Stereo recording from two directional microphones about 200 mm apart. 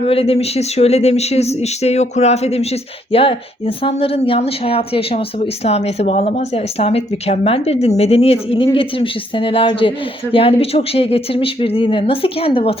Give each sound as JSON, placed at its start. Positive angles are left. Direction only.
{"t": 0.0, "sound": "speech", "side_deg": 30}